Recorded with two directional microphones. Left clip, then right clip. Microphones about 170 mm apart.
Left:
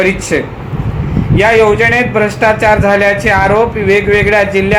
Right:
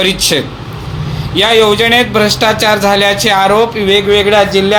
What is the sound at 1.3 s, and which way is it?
Speech, 50° right (ahead or behind).